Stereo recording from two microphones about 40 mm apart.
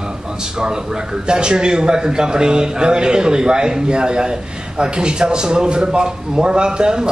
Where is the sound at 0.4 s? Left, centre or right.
Centre.